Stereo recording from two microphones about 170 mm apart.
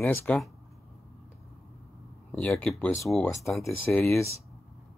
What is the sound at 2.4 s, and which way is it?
Speech, 5° left (ahead or behind).